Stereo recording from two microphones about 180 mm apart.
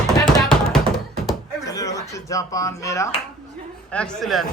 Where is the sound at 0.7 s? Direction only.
Centre (ahead or behind).